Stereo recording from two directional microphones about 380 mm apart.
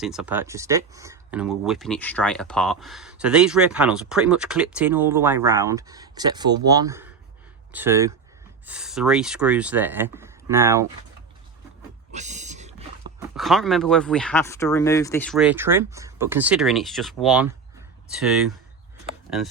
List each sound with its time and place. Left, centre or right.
0.0 s speech: centre
12.1 s roaring cats: centre
13.1 s speech: centre